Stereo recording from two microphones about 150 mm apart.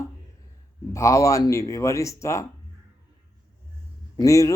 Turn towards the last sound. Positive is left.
turn(degrees=20)  # may be behind; listen again after turning